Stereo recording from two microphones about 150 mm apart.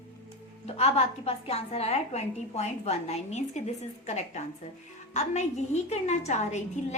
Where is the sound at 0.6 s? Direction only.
45° left (ahead or behind).